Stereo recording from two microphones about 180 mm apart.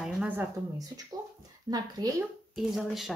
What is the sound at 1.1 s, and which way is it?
A woman's voice, 20° right (ahead or behind).